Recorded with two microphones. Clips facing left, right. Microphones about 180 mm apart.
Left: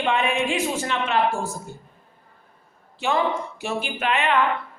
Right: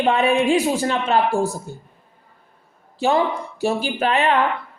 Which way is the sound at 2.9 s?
35° right (ahead or behind).